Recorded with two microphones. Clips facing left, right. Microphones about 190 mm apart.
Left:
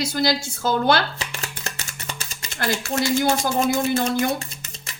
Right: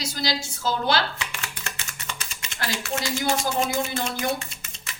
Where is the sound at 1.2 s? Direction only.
35° left (ahead or behind).